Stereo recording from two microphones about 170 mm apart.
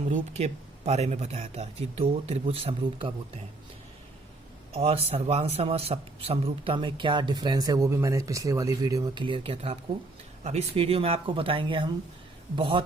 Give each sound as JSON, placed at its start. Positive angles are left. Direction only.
{"t": 0.1, "sound": "speech", "side_deg": -40}
{"t": 4.7, "sound": "a man's voice", "side_deg": -35}